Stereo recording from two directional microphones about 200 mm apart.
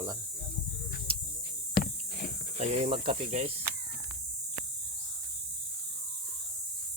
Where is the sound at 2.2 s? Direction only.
55° left (ahead or behind).